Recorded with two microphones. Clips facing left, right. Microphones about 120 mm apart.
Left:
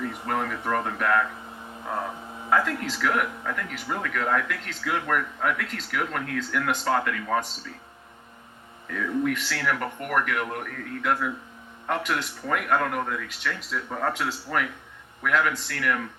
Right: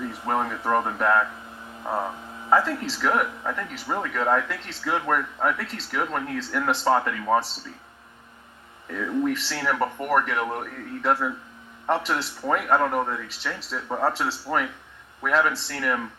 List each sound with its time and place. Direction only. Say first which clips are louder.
0.0 s speech: right 2 dB; 25° right (ahead or behind)
2.5 s speech: right 2 dB; 25° right (ahead or behind)
8.9 s speech: right 1 dB; 30° right (ahead or behind)